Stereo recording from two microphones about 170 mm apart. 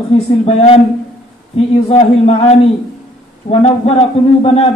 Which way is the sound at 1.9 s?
35° left (ahead or behind).